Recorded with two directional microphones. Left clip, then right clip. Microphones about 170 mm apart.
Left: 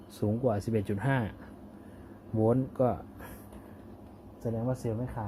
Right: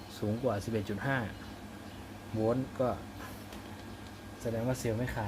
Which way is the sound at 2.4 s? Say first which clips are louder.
Left 4 dB; 45° left (ahead or behind).